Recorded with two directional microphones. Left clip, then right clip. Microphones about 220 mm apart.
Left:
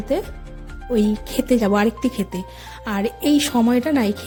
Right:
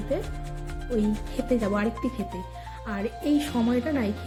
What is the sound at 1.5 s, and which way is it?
A woman's voice, 50° left (ahead or behind).